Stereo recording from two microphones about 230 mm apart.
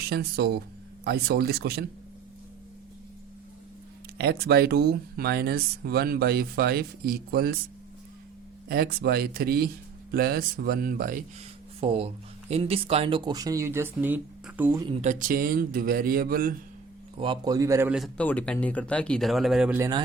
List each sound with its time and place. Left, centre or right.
0.0 s speech: right
4.2 s speech: right
8.7 s speech: right
11.8 s speech: right; by 14.8 s centre
14.8 s speech: right
17.2 s speech: centre